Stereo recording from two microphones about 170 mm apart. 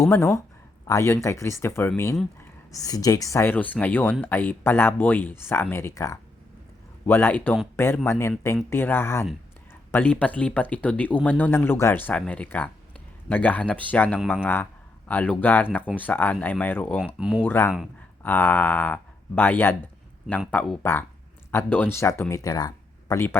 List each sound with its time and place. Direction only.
0.9 s speech: 15° left (ahead or behind)
17.0 s speech: 5° right (ahead or behind)
17.4 s speech: 15° left (ahead or behind)